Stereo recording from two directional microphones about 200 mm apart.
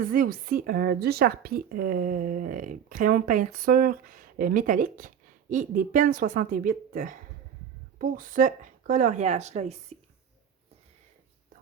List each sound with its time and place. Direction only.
0.0 s speech: 45° right (ahead or behind)